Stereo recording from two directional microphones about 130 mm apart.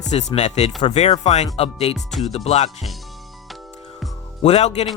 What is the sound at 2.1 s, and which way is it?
Speech, centre (ahead or behind).